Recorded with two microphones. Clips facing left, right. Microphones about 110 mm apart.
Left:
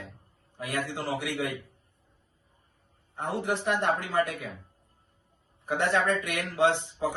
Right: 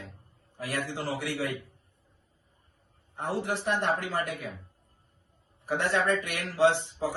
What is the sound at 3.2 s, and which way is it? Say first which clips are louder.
Speech: left 1 dB; 20° left (ahead or behind).